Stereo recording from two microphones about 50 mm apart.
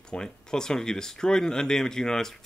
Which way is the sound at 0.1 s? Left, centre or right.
Centre.